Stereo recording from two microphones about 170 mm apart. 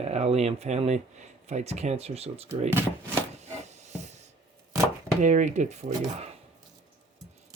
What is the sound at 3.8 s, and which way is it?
Hiss, 40° right (ahead or behind).